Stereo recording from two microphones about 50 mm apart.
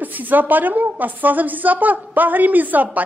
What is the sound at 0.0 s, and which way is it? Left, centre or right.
A woman's voice, right.